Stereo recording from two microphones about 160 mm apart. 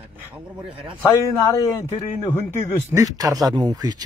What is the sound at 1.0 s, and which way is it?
Speech, 20° left (ahead or behind).